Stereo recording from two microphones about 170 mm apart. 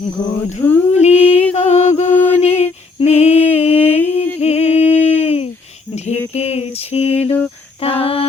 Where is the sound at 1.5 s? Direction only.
40° left (ahead or behind).